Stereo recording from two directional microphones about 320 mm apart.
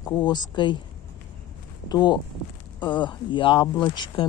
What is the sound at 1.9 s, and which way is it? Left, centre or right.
Speech, centre.